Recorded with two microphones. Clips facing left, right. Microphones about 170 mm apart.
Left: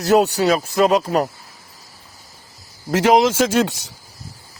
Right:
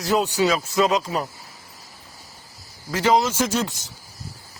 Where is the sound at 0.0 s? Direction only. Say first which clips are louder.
Left 7 dB; 70° left (ahead or behind).